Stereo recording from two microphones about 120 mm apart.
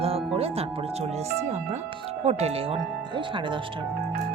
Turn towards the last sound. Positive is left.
turn(degrees=-45)  # may be behind; listen again after turning